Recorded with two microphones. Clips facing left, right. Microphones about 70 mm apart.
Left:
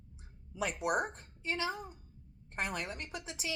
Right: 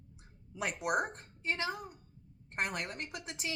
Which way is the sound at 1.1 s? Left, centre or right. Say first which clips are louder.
Right 1 dB; right.